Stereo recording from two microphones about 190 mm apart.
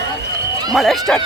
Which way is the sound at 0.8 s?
Centre (ahead or behind).